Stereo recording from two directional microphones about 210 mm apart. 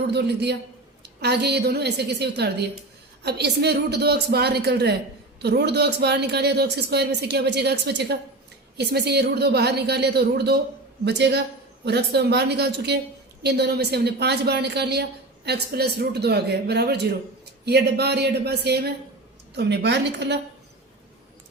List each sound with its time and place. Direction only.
0.1 s a man's voice: 50° right (ahead or behind)